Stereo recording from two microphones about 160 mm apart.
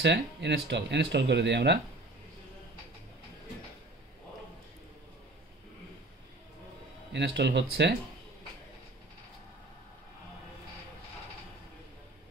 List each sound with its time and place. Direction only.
0.0 s speech: 90° right
7.1 s speech: 90° right